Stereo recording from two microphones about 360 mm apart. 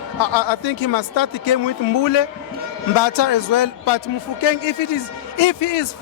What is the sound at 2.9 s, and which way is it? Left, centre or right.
A man's voice, left.